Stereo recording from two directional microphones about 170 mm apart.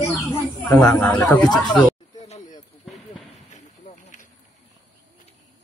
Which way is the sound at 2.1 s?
40° left (ahead or behind).